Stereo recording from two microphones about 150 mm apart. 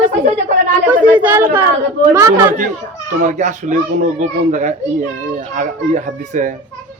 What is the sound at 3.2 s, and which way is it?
A child's voice, 55° right (ahead or behind).